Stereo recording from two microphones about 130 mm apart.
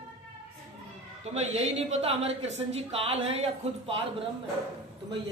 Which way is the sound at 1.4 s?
60° right (ahead or behind).